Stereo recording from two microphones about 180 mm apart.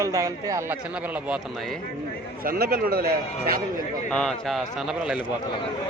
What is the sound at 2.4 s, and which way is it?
Speech, 55° right (ahead or behind).